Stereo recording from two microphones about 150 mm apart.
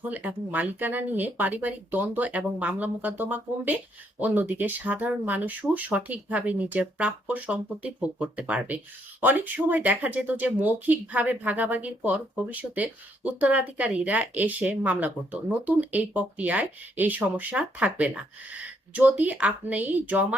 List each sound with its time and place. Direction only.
0.1 s speech: 10° right (ahead or behind)